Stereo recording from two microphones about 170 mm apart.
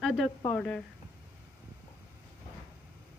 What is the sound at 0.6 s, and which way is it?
Speech, 5° left (ahead or behind).